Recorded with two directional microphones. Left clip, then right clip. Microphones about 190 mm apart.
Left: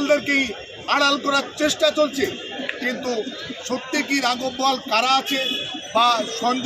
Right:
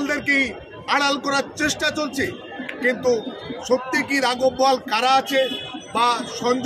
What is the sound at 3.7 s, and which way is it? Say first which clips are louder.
Speech: right 3 dB; 15° right (ahead or behind).